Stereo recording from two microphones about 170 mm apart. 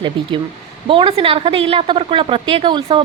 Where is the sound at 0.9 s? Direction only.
30° right (ahead or behind).